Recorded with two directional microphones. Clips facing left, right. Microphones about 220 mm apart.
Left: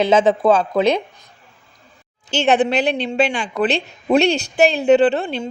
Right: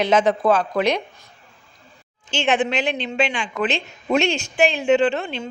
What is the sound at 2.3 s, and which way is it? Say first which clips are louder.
A woman's voice: left 4 dB; 35° left (ahead or behind).